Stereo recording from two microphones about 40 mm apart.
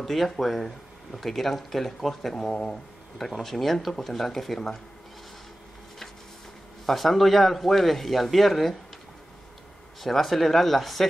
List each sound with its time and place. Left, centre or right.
0.0 s speech: centre
2.5 s speech: left
3.2 s speech: centre
6.9 s speech: centre
10.0 s speech: centre